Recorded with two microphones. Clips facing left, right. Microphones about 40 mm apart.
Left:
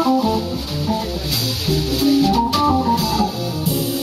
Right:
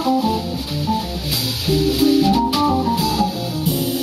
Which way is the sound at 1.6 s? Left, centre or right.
Centre.